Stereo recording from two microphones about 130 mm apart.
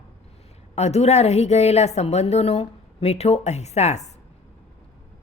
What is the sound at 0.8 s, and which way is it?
A woman's voice, 55° left (ahead or behind).